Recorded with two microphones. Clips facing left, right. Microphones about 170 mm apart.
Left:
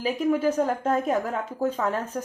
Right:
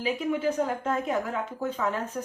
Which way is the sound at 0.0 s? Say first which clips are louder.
Left 4 dB; 40° left (ahead or behind).